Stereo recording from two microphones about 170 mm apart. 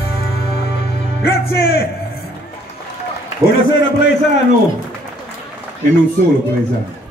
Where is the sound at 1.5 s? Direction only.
65° left (ahead or behind).